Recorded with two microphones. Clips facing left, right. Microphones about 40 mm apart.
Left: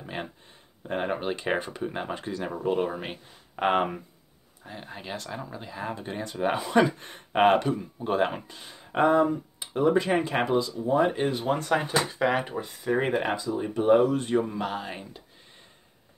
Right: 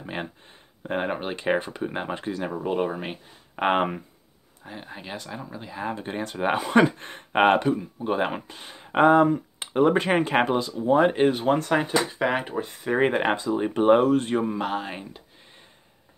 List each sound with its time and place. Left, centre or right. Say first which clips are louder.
0.0 s speech: right 3 dB; right
3.6 s speech: right 2 dB; right
4.6 s speech: right 1 dB; centre
6.0 s speech: right 1 dB; right
7.6 s speech: right 4 dB; centre; by 11.6 s right
11.7 s speech: right 2 dB; centre
12.6 s speech: right 3 dB; right
13.5 s speech: right 2 dB; right
14.3 s speech: right 2 dB; right